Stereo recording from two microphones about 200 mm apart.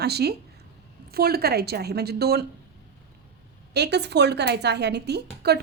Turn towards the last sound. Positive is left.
turn(degrees=-55)  # may be behind; listen again after turning